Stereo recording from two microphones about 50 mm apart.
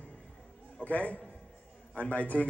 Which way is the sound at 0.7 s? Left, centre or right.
Left.